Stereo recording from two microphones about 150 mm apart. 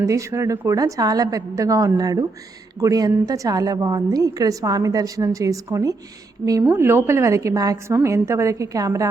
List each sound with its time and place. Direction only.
0.0 s a woman's voice: 20° right (ahead or behind)